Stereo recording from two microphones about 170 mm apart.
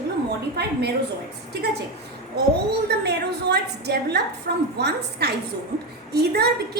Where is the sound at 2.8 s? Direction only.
75° right (ahead or behind).